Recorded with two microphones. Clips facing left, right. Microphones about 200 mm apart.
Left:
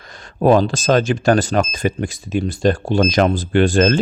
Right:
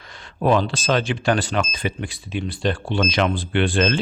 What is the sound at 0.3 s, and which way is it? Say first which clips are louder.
Speech: left 5 dB; 40° left (ahead or behind).